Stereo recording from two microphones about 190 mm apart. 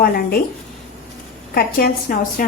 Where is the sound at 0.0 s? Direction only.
50° left (ahead or behind).